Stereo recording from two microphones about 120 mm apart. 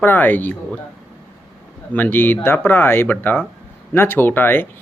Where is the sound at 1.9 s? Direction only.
15° left (ahead or behind).